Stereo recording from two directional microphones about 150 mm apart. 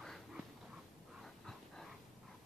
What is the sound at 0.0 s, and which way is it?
Dog, centre (ahead or behind).